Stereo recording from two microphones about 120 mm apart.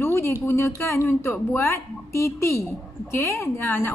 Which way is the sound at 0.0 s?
20° left (ahead or behind).